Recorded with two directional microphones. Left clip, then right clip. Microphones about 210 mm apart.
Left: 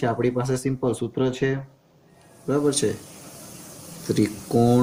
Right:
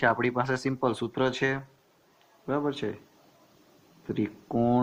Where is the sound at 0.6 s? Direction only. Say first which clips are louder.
Left 3 dB; centre (ahead or behind).